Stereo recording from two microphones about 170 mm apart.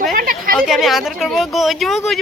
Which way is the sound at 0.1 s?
55° right (ahead or behind).